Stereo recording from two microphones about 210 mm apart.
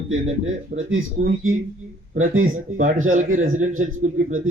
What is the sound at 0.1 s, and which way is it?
Speech, 70° right (ahead or behind).